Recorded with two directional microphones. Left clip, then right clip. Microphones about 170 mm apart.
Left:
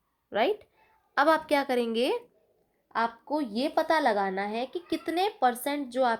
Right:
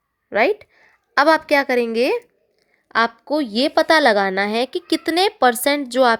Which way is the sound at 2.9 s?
50° right (ahead or behind).